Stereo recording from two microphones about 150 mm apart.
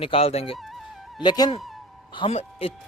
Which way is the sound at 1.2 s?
30° left (ahead or behind).